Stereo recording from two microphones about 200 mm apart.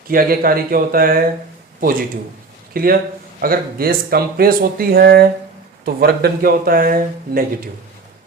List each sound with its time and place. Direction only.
0.1 s speech: 45° right (ahead or behind)